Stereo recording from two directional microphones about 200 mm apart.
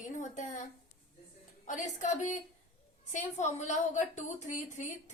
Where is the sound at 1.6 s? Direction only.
40° left (ahead or behind).